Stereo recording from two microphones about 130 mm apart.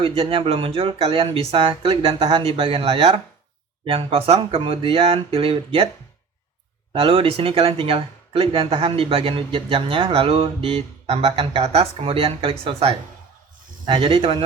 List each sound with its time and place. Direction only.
0.0 s speech: 45° right (ahead or behind)
6.9 s speech: 45° right (ahead or behind)